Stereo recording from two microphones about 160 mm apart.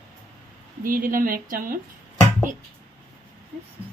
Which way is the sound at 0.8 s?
60° right (ahead or behind).